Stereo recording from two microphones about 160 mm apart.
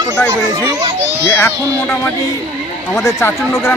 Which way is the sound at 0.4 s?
20° right (ahead or behind).